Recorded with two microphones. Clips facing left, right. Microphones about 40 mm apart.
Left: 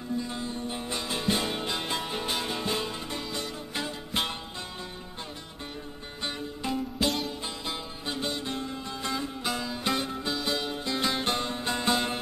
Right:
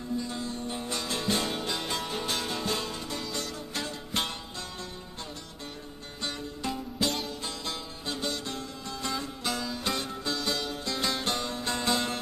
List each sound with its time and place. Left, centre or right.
0.2 s music: centre
6.2 s music: centre